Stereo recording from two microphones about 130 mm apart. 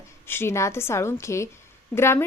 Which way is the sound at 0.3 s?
20° left (ahead or behind).